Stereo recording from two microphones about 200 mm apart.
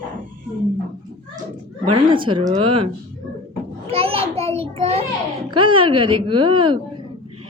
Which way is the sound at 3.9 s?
30° right (ahead or behind).